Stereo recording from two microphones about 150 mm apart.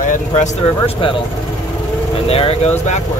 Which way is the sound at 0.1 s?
55° left (ahead or behind).